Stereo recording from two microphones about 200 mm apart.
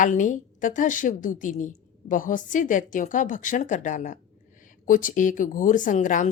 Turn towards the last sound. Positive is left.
turn(degrees=40)  # may be behind; listen again after turning